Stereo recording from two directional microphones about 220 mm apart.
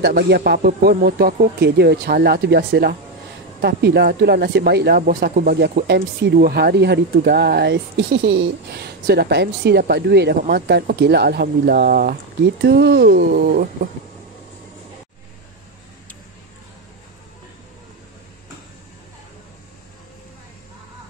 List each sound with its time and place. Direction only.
0.0 s speech: 45° right (ahead or behind)